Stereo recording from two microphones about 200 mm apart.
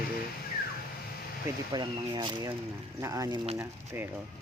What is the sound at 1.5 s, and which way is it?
Speech, 20° right (ahead or behind).